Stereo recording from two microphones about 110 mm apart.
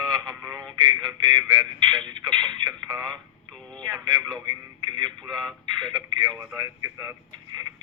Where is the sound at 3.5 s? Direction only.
10° left (ahead or behind).